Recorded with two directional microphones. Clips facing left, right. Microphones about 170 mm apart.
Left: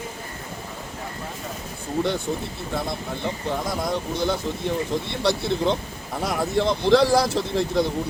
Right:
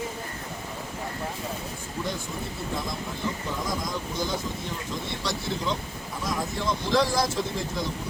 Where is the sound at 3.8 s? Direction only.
65° left (ahead or behind).